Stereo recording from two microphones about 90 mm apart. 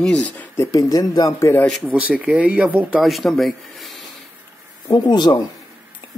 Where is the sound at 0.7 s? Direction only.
45° left (ahead or behind).